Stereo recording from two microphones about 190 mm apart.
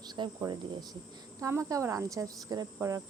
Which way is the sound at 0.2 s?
20° right (ahead or behind).